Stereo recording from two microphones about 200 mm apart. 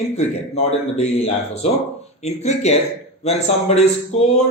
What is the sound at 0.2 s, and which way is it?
A man's voice, 30° left (ahead or behind).